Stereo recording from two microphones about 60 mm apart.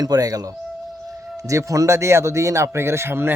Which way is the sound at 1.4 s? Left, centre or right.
Right.